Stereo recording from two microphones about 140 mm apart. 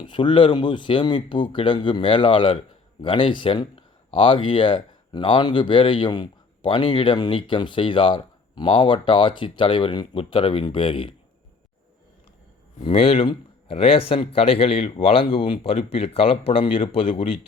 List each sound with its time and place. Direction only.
0.0 s speech: 35° left (ahead or behind)
12.8 s speech: 45° left (ahead or behind)